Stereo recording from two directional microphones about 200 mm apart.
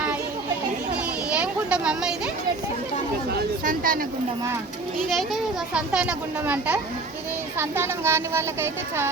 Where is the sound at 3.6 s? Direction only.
45° right (ahead or behind).